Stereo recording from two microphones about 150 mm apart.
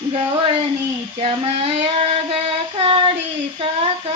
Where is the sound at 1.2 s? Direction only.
40° right (ahead or behind).